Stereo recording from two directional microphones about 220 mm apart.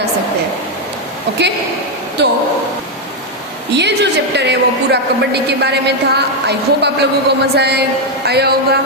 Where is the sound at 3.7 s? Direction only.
50° right (ahead or behind).